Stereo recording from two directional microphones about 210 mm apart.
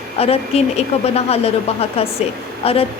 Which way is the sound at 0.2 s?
30° left (ahead or behind).